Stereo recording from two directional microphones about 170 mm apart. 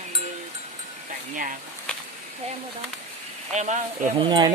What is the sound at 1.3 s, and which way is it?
Speech, 50° right (ahead or behind).